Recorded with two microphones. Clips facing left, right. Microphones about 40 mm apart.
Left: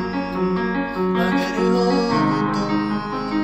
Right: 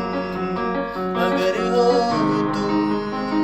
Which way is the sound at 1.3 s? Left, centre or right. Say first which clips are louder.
Even; right.